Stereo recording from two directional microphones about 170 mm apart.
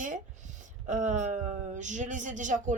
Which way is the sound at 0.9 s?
45° right (ahead or behind).